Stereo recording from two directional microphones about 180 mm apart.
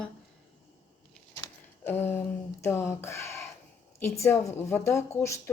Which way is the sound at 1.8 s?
15° left (ahead or behind).